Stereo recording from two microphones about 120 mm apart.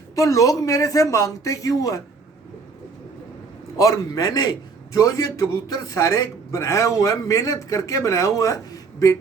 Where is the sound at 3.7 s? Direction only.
25° left (ahead or behind).